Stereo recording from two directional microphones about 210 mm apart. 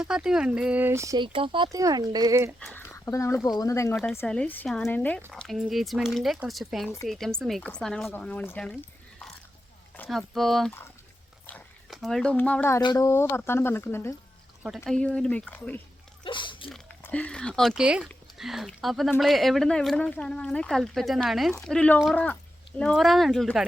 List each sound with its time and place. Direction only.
0.0 s speech: 5° right (ahead or behind)
2.6 s speech: 10° left (ahead or behind)
10.0 s speech: centre (ahead or behind)
16.2 s speech: 25° left (ahead or behind)
16.7 s speech: 5° left (ahead or behind)